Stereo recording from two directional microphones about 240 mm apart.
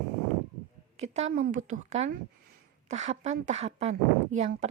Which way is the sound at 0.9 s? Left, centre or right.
Right.